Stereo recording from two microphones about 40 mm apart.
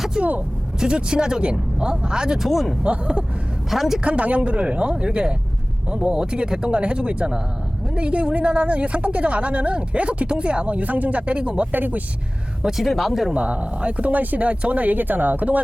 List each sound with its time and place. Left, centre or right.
0.2 s speech: right
0.8 s speech: right
2.4 s speech: centre
2.8 s speech: right
3.7 s a woman's voice: centre
4.0 s a woman's voice: right
11.7 s speech: right
12.8 s speech: centre
13.3 s a woman's voice: right
14.1 s speech: right